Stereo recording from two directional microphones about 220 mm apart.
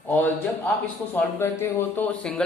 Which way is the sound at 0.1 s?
10° left (ahead or behind).